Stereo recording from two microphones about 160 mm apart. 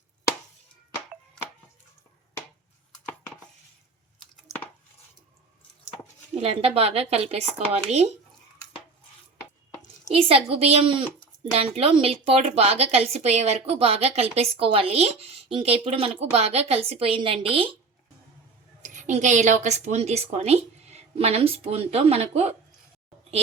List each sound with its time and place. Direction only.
4.4 s a sound: 10° left (ahead or behind)
6.4 s a woman's voice: 40° right (ahead or behind)
10.2 s a woman's voice: 35° right (ahead or behind)
18.8 s a woman's voice: 50° right (ahead or behind)